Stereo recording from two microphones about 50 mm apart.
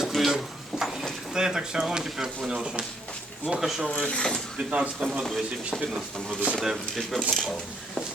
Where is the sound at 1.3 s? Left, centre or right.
Centre.